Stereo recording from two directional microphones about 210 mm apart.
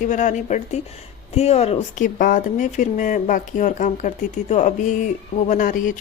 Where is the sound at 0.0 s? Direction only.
35° left (ahead or behind).